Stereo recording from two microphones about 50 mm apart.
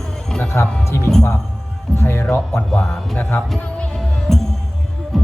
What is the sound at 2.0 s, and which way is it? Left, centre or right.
Speech, left.